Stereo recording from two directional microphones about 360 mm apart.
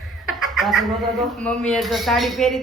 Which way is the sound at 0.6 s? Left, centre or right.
Centre.